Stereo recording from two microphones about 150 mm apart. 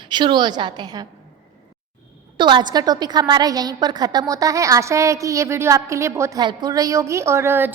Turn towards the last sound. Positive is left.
turn(degrees=-15)  # may be behind; listen again after turning